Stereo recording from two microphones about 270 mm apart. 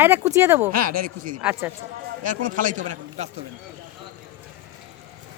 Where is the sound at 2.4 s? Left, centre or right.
Right.